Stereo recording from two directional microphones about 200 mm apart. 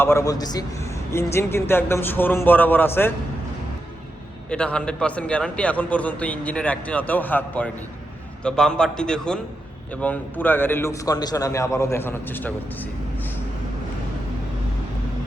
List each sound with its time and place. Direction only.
0.0 s a man's voice: 15° left (ahead or behind)
4.4 s a man's voice: 5° left (ahead or behind)